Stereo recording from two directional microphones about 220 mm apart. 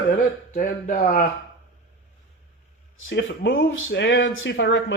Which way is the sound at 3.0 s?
55° left (ahead or behind).